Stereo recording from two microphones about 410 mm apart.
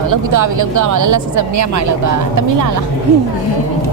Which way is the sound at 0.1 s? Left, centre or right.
Right.